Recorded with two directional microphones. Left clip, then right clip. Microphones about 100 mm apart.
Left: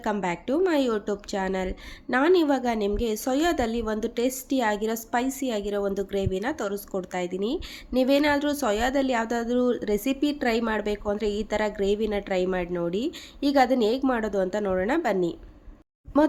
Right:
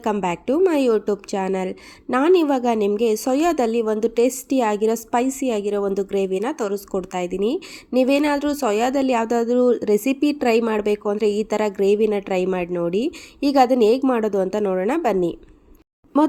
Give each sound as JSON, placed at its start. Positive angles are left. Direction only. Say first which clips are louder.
{"t": 0.0, "sound": "a woman's voice", "louder": "right 5 dB", "side_deg": -55}